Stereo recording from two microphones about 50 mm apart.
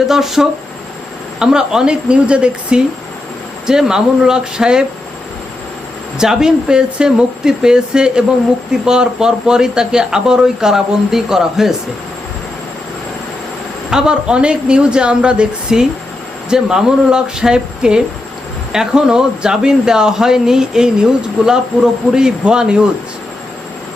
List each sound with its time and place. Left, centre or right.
0.1 s speech: centre
6.1 s speech: centre
13.9 s speech: centre